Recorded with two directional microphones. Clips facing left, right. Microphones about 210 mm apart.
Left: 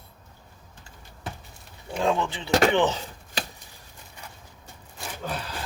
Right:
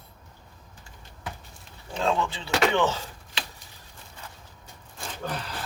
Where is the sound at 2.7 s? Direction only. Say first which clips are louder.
Left 2 dB; 15° left (ahead or behind).